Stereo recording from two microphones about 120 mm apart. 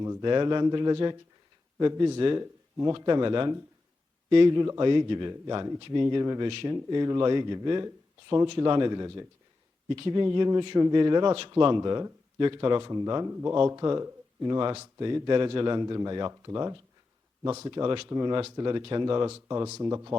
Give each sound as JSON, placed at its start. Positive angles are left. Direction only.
{"t": 0.2, "sound": "a man's voice", "side_deg": -35}